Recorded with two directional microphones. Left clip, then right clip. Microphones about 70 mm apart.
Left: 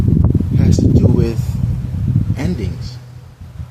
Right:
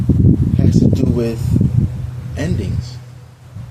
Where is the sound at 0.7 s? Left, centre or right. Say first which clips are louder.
Left 2 dB; left.